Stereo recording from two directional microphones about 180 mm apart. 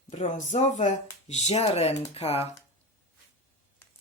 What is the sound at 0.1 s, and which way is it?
Speech, 40° left (ahead or behind).